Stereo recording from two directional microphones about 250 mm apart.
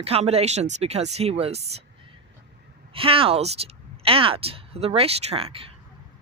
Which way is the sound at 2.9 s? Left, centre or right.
Right.